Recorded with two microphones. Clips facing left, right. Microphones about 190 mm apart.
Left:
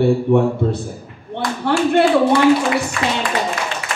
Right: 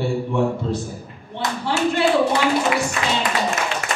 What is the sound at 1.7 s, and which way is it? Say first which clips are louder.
Clapping: left 7 dB; 60° left (ahead or behind).